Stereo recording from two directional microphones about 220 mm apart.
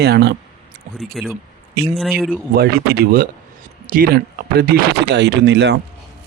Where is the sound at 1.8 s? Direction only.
45° right (ahead or behind).